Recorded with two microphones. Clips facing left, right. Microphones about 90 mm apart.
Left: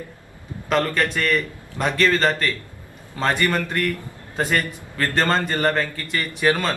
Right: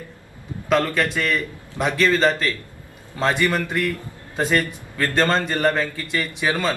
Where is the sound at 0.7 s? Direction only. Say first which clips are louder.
Right 1 dB; 10° right (ahead or behind).